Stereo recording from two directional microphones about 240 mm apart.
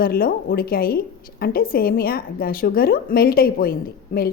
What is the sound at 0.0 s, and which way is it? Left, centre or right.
A woman's voice, left.